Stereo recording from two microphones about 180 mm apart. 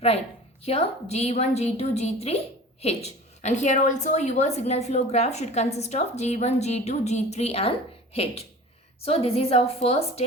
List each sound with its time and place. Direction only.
0.6 s a woman's voice: 35° left (ahead or behind)